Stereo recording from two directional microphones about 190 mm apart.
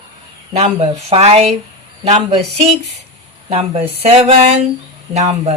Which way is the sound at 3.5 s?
30° right (ahead or behind).